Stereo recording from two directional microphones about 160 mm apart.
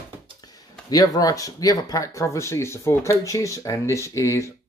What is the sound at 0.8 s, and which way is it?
Speech, 25° left (ahead or behind).